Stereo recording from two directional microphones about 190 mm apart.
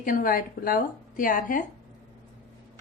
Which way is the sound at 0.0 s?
45° left (ahead or behind).